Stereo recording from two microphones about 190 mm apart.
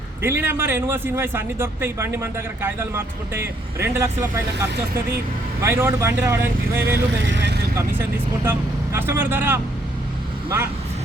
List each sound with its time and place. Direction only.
0.2 s a man's voice: 10° right (ahead or behind)
5.5 s a man's voice: 10° right (ahead or behind)
7.2 s speech: 75° right (ahead or behind)
8.4 s a man's voice: 10° right (ahead or behind)